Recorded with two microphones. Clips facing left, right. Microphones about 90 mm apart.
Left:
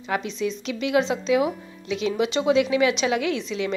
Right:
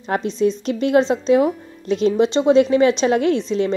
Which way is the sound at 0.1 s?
40° right (ahead or behind).